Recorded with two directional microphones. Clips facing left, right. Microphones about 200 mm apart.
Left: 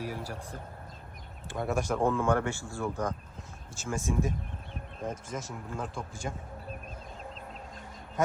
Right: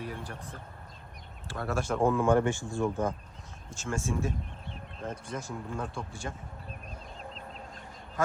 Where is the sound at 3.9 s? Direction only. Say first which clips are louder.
Left 1 dB; 15° left (ahead or behind).